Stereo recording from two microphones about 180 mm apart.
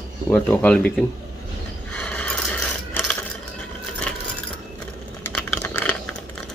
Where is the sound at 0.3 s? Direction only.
10° left (ahead or behind).